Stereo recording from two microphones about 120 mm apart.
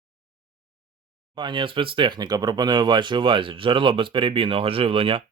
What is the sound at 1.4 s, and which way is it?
Speech, 40° right (ahead or behind).